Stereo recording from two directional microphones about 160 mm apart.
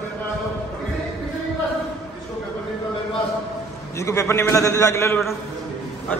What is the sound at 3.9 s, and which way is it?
A man's voice, 20° left (ahead or behind).